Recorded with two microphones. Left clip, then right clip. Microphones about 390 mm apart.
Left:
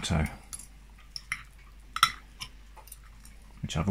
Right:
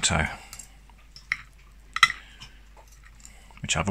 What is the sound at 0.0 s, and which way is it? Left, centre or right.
Speech, right.